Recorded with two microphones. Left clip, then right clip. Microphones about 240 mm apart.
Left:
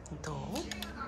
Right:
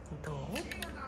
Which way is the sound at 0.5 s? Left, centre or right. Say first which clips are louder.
Right 1 dB; left.